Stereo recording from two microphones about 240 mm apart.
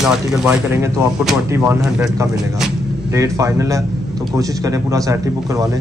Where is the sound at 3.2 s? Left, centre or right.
Centre.